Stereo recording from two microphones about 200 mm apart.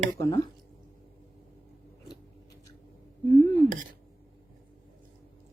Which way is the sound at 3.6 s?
40° right (ahead or behind).